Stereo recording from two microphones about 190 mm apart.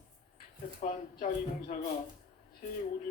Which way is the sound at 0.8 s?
45° left (ahead or behind).